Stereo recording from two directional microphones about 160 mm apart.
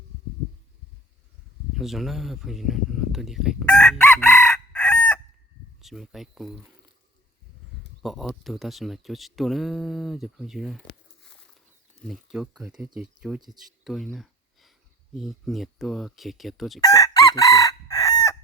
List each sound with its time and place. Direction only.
1.7 s speech: centre (ahead or behind)
3.9 s chicken: 15° left (ahead or behind)
5.8 s speech: centre (ahead or behind)
8.0 s speech: centre (ahead or behind)
12.0 s speech: centre (ahead or behind)
13.8 s a sound: centre (ahead or behind)
15.1 s speech: centre (ahead or behind)
16.8 s chicken: 20° left (ahead or behind)